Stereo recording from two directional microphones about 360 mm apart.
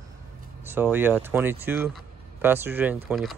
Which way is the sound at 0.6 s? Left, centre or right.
Centre.